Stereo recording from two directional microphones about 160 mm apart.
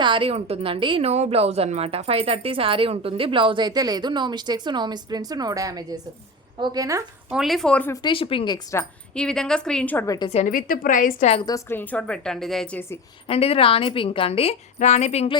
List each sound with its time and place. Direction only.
0.0 s a woman's voice: 30° right (ahead or behind)
7.3 s a woman's voice: centre (ahead or behind)
8.0 s speech: 35° left (ahead or behind)
9.1 s a woman's voice: 5° left (ahead or behind)
10.2 s a woman's voice: 40° left (ahead or behind)
10.5 s a woman's voice: 60° left (ahead or behind)
11.4 s a woman's voice: 15° left (ahead or behind); by 12.8 s centre (ahead or behind)
13.2 s a woman's voice: 40° left (ahead or behind)